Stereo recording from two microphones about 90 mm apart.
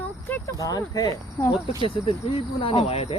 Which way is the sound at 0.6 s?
40° left (ahead or behind).